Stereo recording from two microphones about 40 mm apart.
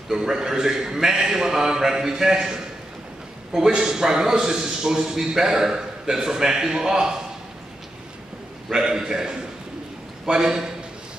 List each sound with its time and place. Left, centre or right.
0.1 s a man's voice: centre
8.6 s a man's voice: centre